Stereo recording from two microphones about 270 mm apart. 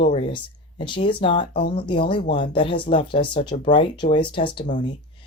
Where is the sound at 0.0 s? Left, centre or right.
Centre.